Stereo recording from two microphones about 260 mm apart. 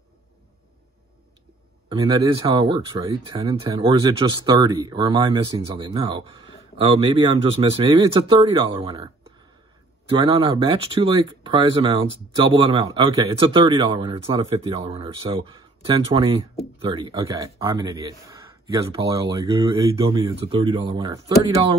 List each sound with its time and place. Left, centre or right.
1.9 s speech: centre
10.1 s speech: centre